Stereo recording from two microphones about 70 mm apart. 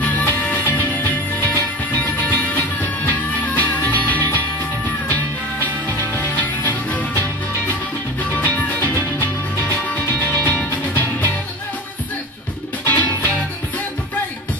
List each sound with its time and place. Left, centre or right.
0.0 s music: left
6.1 s music: left
8.4 s music: left
12.8 s music: left